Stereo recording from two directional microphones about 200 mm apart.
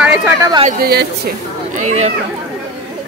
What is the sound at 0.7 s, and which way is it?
Speech, 50° right (ahead or behind).